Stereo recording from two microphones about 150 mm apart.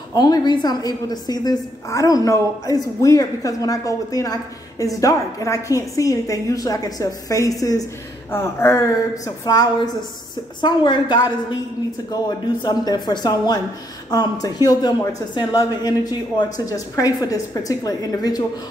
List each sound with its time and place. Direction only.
0.1 s a woman's voice: 25° left (ahead or behind)
12.6 s a woman's voice: 25° left (ahead or behind)